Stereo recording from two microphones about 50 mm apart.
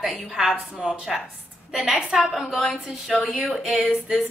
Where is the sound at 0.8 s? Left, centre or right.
Centre.